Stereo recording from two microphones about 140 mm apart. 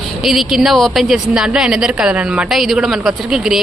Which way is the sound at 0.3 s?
Centre (ahead or behind).